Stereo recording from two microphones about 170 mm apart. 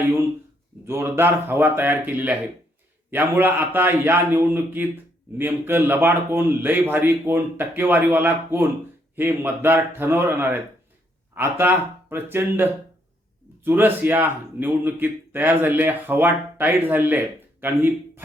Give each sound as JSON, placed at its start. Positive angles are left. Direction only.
{"t": 0.9, "sound": "a man's voice", "side_deg": -15}